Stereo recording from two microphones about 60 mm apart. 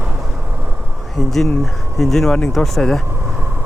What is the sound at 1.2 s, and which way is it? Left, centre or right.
Speech, centre.